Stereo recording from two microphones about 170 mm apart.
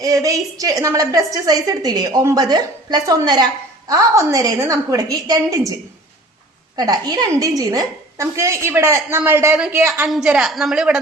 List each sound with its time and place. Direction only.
0.0 s a woman's voice: 20° right (ahead or behind)
6.7 s a woman's voice: 25° right (ahead or behind); by 10.9 s 5° right (ahead or behind)